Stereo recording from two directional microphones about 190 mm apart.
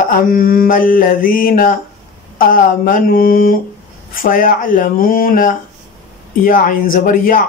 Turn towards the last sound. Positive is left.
turn(degrees=45)  # may be behind; listen again after turning